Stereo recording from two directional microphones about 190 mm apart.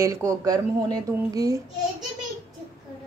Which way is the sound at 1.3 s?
15° right (ahead or behind).